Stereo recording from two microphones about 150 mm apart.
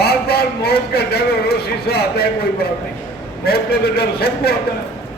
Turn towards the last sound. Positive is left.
turn(degrees=90)